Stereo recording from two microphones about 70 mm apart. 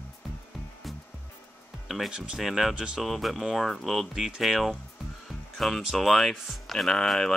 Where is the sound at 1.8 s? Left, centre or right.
Centre.